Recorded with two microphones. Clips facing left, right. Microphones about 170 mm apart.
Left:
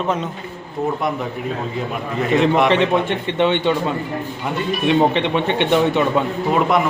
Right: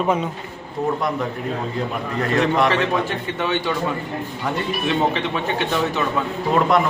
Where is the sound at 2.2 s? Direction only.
5° left (ahead or behind).